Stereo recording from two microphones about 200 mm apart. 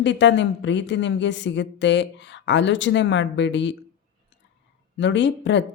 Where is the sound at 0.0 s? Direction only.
60° left (ahead or behind).